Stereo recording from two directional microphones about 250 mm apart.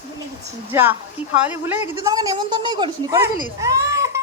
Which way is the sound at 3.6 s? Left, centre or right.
Centre.